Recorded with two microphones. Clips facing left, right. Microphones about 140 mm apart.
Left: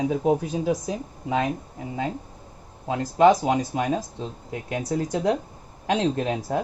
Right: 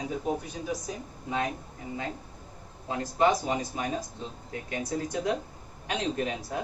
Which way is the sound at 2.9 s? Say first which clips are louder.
Left 7 dB; 90° left.